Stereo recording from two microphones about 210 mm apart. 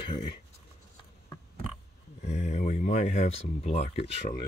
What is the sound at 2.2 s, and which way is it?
Speech, 35° left (ahead or behind).